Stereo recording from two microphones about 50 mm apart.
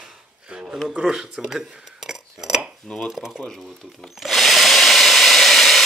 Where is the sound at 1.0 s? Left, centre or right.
Centre.